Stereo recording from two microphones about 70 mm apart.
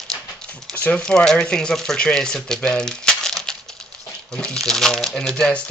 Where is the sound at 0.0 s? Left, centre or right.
Centre.